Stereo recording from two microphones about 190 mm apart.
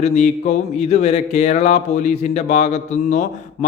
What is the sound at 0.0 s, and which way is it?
A man's voice, 35° left (ahead or behind).